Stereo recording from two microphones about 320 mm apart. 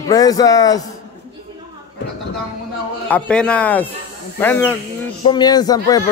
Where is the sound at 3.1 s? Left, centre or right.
Centre.